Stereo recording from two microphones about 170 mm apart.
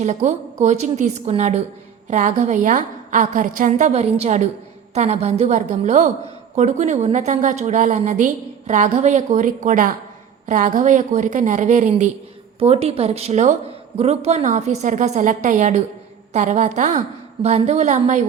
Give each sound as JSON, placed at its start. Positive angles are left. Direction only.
{"t": 0.0, "sound": "a woman's voice", "side_deg": -45}